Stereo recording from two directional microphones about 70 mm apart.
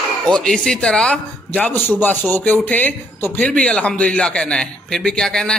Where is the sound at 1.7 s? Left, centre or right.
Left.